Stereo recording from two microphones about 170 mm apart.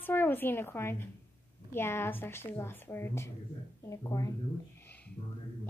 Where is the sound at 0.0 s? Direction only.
10° left (ahead or behind).